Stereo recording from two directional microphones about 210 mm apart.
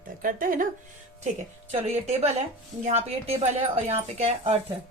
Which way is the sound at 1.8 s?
30° right (ahead or behind).